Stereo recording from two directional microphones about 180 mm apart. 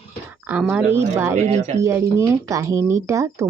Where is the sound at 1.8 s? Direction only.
15° right (ahead or behind).